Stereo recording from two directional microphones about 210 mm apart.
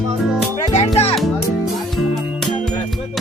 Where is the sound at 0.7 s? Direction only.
30° left (ahead or behind).